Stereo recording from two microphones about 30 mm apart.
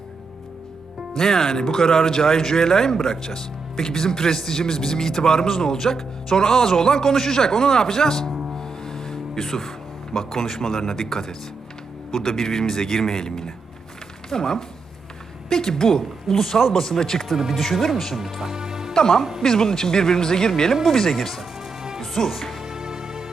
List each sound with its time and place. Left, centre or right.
1.1 s speech: centre
8.5 s music: centre
12.2 s speech: centre
16.3 s speech: centre
17.3 s speech: centre
17.6 s speech: centre
17.9 s speech: centre
18.3 s music: right
18.9 s speech: centre
21.8 s music: right
22.0 s music: centre
22.6 s music: right